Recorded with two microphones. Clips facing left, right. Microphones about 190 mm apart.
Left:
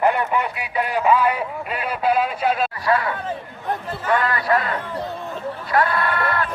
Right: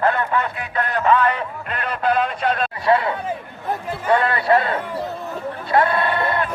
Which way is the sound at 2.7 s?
25° right (ahead or behind).